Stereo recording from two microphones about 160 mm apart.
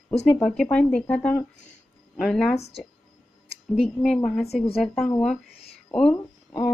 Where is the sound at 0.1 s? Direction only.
45° left (ahead or behind).